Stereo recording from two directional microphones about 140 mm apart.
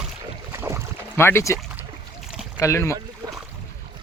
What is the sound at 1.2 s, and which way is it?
Speech, 15° left (ahead or behind).